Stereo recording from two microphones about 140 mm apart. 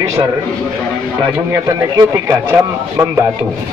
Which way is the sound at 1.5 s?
20° right (ahead or behind).